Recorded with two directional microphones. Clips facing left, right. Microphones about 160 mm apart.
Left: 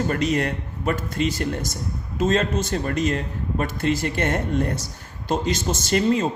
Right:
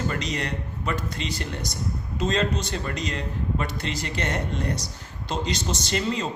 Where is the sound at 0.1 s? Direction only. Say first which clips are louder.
Left 7 dB; 50° left (ahead or behind).